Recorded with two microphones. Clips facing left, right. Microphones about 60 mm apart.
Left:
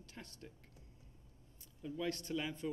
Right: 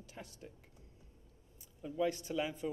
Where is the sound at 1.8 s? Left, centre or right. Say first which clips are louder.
Right 5 dB; centre.